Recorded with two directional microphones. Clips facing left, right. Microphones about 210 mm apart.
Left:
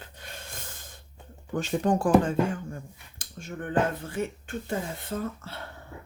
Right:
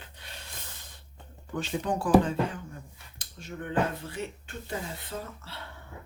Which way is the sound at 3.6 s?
50° left (ahead or behind).